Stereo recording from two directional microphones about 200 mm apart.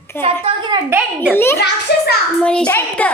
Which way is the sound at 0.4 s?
25° right (ahead or behind).